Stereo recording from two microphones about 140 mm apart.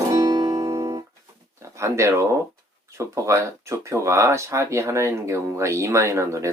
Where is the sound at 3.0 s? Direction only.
20° right (ahead or behind).